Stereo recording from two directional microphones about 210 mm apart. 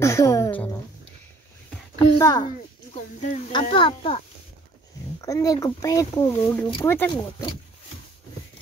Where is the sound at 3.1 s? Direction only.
35° left (ahead or behind).